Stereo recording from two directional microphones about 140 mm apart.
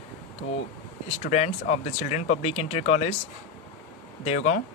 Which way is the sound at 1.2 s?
55° left (ahead or behind).